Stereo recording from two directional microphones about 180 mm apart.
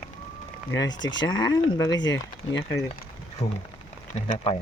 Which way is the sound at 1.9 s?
90° left.